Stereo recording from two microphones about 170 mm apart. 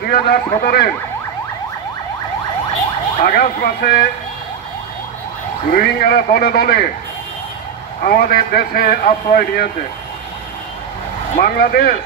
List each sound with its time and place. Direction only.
0.0 s a man's voice: 65° left (ahead or behind)
3.2 s a man's voice: 65° left (ahead or behind)
5.8 s a man's voice: 60° left (ahead or behind)
8.0 s a man's voice: 60° left (ahead or behind)
11.3 s a man's voice: 60° left (ahead or behind)